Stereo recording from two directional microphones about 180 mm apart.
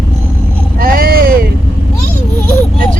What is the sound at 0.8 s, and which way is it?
Vehicle, 55° right (ahead or behind).